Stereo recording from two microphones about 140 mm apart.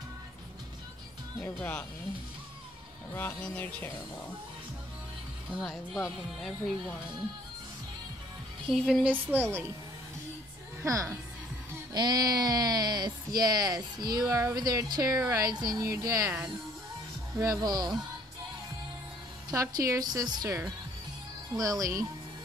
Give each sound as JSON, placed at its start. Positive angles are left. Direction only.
{"t": 1.4, "sound": "music", "side_deg": 10}
{"t": 3.2, "sound": "music", "side_deg": 10}
{"t": 5.6, "sound": "speech", "side_deg": 0}
{"t": 8.6, "sound": "speech", "side_deg": 0}
{"t": 9.1, "sound": "a woman's voice", "side_deg": -15}
{"t": 10.8, "sound": "a woman's voice", "side_deg": -25}
{"t": 17.4, "sound": "speech", "side_deg": -25}
{"t": 19.5, "sound": "speech", "side_deg": -25}